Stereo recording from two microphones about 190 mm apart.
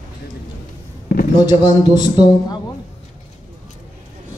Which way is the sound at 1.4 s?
20° left (ahead or behind).